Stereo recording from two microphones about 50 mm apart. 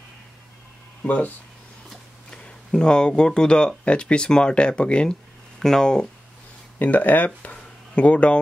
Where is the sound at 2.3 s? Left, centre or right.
Centre.